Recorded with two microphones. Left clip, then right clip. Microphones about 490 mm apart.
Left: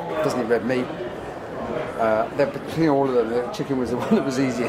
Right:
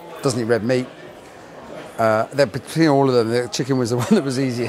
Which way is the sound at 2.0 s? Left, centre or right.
Right.